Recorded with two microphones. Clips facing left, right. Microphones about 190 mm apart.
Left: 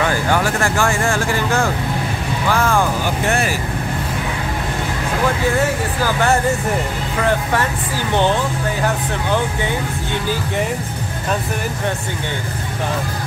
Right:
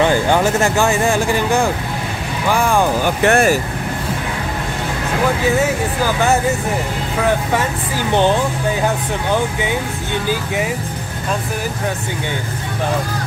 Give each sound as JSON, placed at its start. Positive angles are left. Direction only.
{"t": 0.0, "sound": "speech", "side_deg": -25}
{"t": 3.3, "sound": "speech", "side_deg": -50}